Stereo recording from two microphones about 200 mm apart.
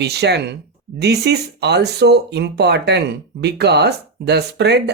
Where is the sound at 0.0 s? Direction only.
55° right (ahead or behind).